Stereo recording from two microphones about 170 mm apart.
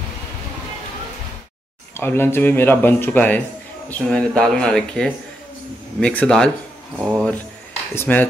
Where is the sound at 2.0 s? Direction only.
15° left (ahead or behind).